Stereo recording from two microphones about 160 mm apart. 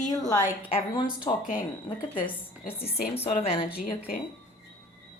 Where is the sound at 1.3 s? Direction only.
20° left (ahead or behind).